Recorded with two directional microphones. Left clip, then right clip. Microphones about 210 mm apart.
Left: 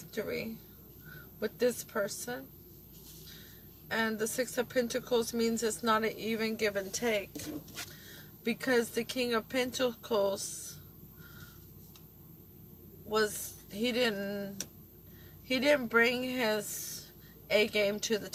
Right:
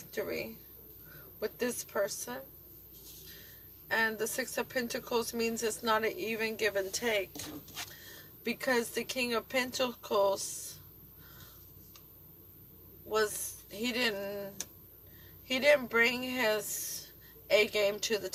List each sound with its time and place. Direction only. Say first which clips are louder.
0.1 s speech: even; 25° right (ahead or behind)
3.8 s speech: right 2 dB; 25° right (ahead or behind)
8.4 s speech: left 1 dB; 25° right (ahead or behind)
13.1 s speech: even; 25° right (ahead or behind)